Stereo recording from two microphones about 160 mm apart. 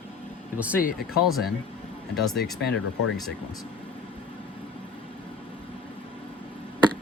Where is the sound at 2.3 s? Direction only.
80° left.